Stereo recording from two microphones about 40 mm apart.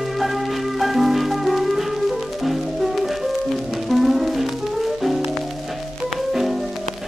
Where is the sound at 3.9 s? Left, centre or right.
Centre.